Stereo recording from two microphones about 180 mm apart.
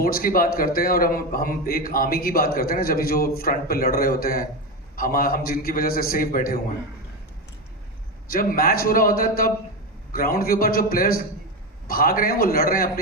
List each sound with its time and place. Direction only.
0.0 s a man's voice: 55° left (ahead or behind)
8.3 s a man's voice: 55° left (ahead or behind)